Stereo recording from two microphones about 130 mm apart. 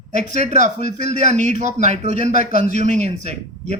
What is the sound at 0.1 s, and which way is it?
A man's voice, 65° right (ahead or behind).